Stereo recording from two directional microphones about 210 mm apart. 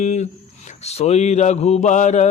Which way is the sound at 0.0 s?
35° left (ahead or behind).